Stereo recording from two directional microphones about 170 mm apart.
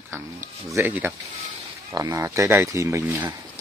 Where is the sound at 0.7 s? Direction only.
15° right (ahead or behind).